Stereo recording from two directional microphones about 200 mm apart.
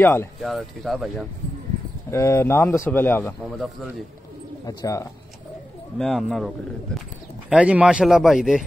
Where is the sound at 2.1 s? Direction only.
15° left (ahead or behind).